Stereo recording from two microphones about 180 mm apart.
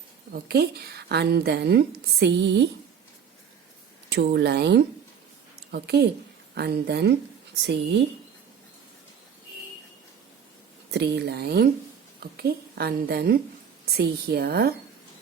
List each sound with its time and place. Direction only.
0.3 s a woman's voice: 60° right (ahead or behind)
4.4 s a woman's voice: 65° right (ahead or behind)
10.9 s a woman's voice: 70° right (ahead or behind)